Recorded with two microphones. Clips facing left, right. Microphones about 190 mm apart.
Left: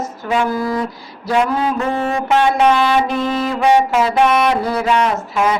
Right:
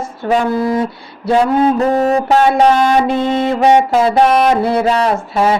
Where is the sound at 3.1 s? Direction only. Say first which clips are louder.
Right 4 dB; 25° right (ahead or behind).